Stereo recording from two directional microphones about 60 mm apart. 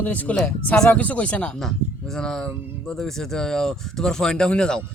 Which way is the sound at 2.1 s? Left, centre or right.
Centre.